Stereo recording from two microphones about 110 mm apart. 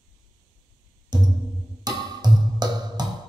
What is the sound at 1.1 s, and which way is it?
Music, 40° right (ahead or behind).